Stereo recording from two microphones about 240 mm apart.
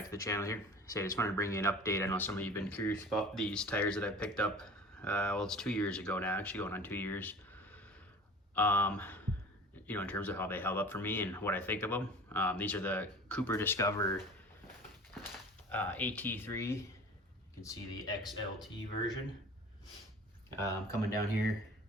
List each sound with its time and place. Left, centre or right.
0.1 s speech: centre
15.7 s speech: centre
18.2 s speech: centre
20.8 s speech: right